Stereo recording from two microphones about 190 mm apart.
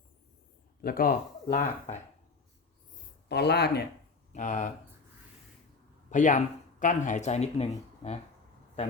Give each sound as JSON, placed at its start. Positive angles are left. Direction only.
{"t": 0.8, "sound": "speech", "side_deg": 50}
{"t": 3.2, "sound": "speech", "side_deg": 60}
{"t": 4.3, "sound": "speech", "side_deg": 40}
{"t": 6.1, "sound": "speech", "side_deg": 40}